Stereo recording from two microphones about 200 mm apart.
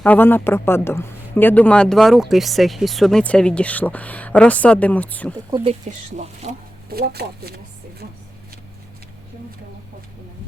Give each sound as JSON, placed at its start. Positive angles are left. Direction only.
{"t": 0.0, "sound": "a man's voice", "side_deg": 10}
{"t": 5.5, "sound": "speech", "side_deg": -20}
{"t": 6.1, "sound": "speech", "side_deg": -35}
{"t": 6.9, "sound": "speech", "side_deg": -50}